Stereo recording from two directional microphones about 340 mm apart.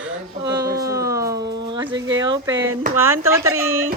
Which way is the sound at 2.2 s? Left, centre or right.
Centre.